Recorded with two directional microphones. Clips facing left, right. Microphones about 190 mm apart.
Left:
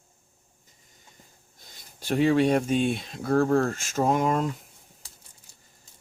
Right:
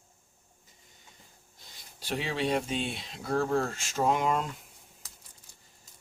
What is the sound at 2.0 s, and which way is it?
Speech, 50° left (ahead or behind).